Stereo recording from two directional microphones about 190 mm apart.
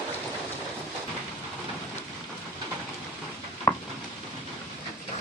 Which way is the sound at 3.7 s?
10° left (ahead or behind).